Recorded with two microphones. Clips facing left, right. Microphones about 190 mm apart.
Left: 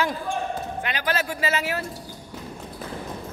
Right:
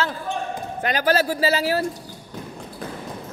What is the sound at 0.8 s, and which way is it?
Speech, 40° right (ahead or behind).